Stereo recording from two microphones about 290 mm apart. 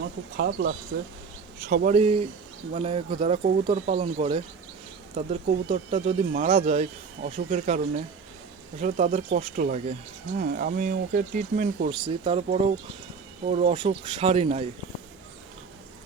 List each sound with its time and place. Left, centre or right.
0.3 s speech: right
8.8 s speech: right